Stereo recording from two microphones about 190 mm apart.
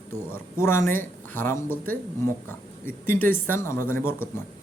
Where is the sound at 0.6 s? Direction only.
15° left (ahead or behind).